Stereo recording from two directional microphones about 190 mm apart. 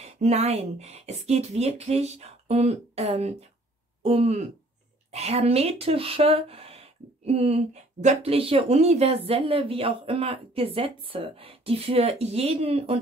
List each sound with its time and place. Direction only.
0.0 s speech: 35° right (ahead or behind)